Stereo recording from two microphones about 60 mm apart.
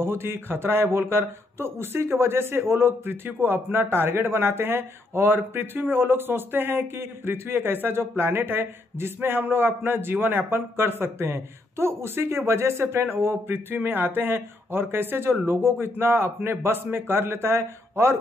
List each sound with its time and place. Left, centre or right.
0.0 s a man's voice: right